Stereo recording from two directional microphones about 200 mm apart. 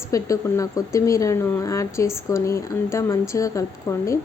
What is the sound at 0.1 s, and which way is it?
Speech, 15° left (ahead or behind).